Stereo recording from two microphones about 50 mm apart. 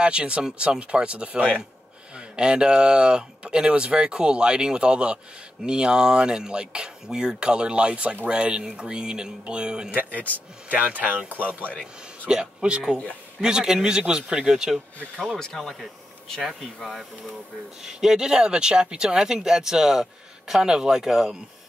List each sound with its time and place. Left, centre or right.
0.0 s speech: right
9.8 s a man's voice: right
12.3 s speech: centre
15.3 s speech: centre
17.8 s speech: centre